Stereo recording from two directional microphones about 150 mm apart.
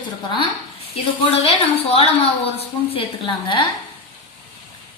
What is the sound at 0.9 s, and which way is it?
A woman's voice, 45° left (ahead or behind).